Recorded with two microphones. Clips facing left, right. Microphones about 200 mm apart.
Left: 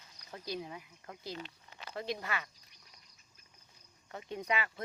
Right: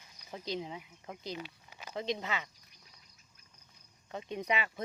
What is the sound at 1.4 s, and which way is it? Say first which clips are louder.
Speech: right 2 dB; 10° right (ahead or behind).